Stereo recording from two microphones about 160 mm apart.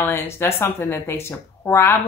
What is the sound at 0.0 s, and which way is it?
Speech, 15° left (ahead or behind).